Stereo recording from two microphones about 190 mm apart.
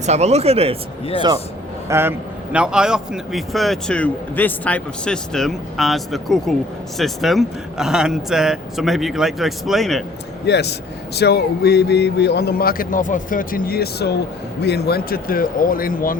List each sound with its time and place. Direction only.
0.0 s speech: 35° right (ahead or behind)
1.9 s a man's voice: 10° right (ahead or behind)
10.4 s speech: 60° left (ahead or behind)